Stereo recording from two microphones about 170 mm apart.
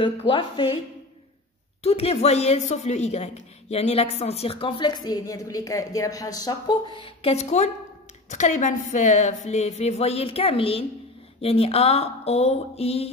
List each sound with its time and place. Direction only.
0.0 s speech: 30° left (ahead or behind)
1.8 s speech: 35° left (ahead or behind)